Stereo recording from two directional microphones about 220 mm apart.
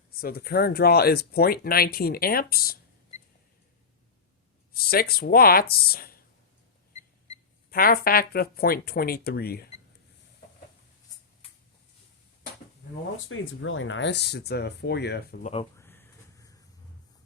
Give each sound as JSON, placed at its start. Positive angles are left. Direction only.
{"t": 0.2, "sound": "speech", "side_deg": 45}
{"t": 4.7, "sound": "speech", "side_deg": 45}
{"t": 7.7, "sound": "speech", "side_deg": 40}
{"t": 13.2, "sound": "speech", "side_deg": 60}
{"t": 15.8, "sound": "vehicle", "side_deg": 10}